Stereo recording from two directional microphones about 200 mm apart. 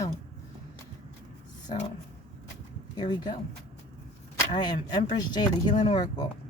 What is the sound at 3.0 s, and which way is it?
Speech, 20° left (ahead or behind).